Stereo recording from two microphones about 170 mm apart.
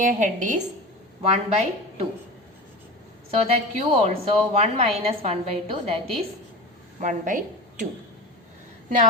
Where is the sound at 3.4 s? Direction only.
35° right (ahead or behind).